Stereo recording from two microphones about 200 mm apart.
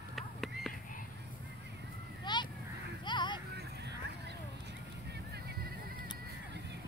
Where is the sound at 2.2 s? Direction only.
20° left (ahead or behind).